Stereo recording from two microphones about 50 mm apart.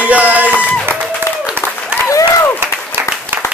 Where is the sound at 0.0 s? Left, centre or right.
Right.